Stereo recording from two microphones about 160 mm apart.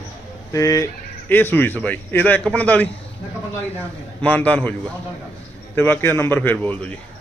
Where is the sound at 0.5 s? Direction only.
20° left (ahead or behind).